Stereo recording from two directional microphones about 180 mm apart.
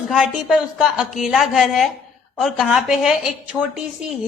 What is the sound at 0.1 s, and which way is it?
Speech, centre (ahead or behind).